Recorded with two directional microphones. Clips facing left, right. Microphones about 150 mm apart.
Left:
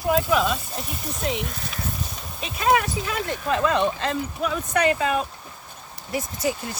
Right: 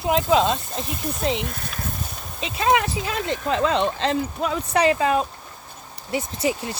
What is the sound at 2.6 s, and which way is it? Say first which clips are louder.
Speech: right 1 dB; 25° right (ahead or behind).